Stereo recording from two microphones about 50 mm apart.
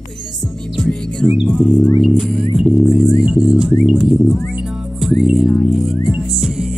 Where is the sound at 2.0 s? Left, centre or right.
Centre.